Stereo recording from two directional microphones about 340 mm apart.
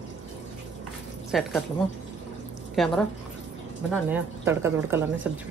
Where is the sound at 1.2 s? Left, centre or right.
Centre.